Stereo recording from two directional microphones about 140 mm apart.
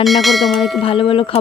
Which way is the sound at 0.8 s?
40° left (ahead or behind).